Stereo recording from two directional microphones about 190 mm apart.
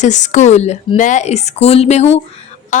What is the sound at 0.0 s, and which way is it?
A woman's voice, 40° left (ahead or behind).